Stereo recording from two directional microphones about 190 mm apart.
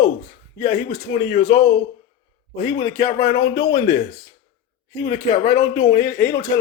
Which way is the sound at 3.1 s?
55° left (ahead or behind).